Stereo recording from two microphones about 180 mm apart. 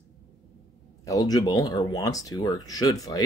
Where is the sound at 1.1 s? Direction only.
20° left (ahead or behind).